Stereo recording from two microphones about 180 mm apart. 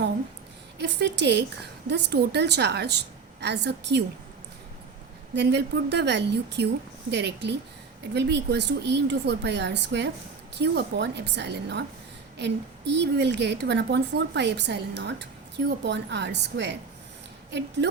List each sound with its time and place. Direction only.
0.8 s a woman's voice: 75° right (ahead or behind)
5.3 s a woman's voice: 70° right (ahead or behind)